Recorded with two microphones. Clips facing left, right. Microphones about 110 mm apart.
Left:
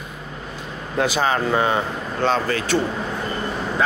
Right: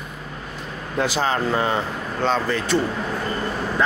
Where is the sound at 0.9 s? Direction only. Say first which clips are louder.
Left 2 dB; 15° left (ahead or behind).